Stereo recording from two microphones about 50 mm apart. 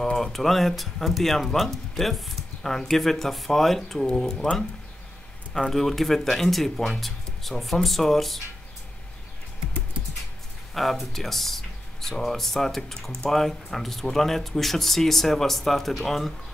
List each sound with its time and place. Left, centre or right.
0.0 s speech: centre
5.5 s speech: centre
10.7 s speech: centre